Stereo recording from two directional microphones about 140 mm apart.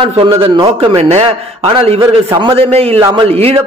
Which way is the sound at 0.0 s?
40° right (ahead or behind).